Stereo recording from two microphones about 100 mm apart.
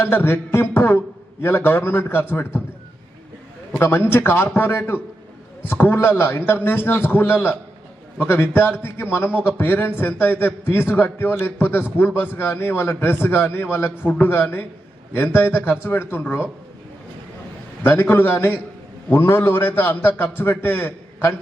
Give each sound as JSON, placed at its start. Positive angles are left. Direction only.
{"t": 0.0, "sound": "a man's voice", "side_deg": 20}
{"t": 3.7, "sound": "a man's voice", "side_deg": 25}
{"t": 17.8, "sound": "a man's voice", "side_deg": 25}